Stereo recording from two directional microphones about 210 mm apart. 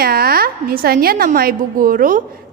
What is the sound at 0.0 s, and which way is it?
A woman's voice, 45° right (ahead or behind).